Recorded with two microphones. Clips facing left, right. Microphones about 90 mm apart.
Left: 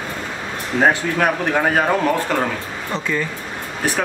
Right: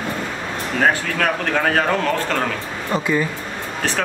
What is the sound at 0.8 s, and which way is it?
Speech, 15° left (ahead or behind).